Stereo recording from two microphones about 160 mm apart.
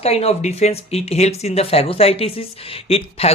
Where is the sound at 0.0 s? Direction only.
40° left (ahead or behind).